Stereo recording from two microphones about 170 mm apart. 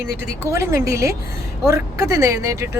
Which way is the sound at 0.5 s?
15° right (ahead or behind).